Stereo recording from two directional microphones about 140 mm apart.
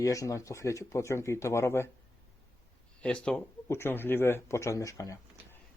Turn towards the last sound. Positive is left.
turn(degrees=25)  # may be behind; listen again after turning